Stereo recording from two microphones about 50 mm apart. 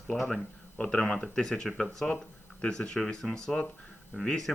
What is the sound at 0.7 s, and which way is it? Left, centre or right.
Speech, centre.